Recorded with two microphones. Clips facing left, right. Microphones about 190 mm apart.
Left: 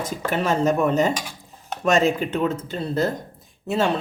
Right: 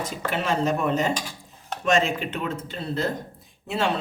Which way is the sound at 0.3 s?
45° left (ahead or behind).